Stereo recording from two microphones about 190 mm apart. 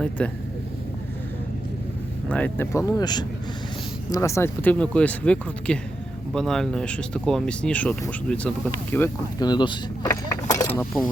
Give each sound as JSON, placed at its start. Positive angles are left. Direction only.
{"t": 0.2, "sound": "speech", "side_deg": 5}
{"t": 2.3, "sound": "speech", "side_deg": 10}
{"t": 9.4, "sound": "speech", "side_deg": 25}